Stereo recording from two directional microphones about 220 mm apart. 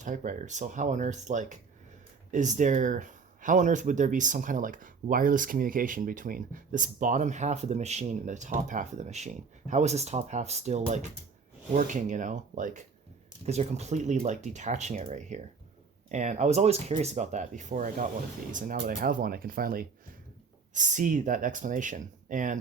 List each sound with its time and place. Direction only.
0.0 s speech: 35° right (ahead or behind)